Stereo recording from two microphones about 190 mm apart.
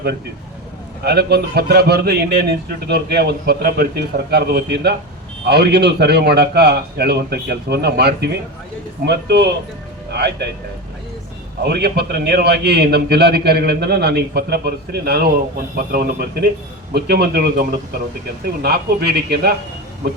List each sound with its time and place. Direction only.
1.0 s a man's voice: 60° right (ahead or behind)
11.6 s a man's voice: 60° right (ahead or behind)